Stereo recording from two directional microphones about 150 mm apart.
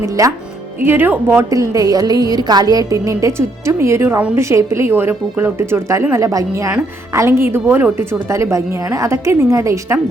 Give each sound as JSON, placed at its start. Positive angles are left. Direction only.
{"t": 0.0, "sound": "a woman's voice", "side_deg": -20}